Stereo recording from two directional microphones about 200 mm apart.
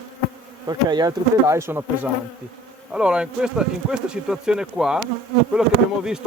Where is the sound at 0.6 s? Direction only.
20° right (ahead or behind); by 5.7 s 5° right (ahead or behind).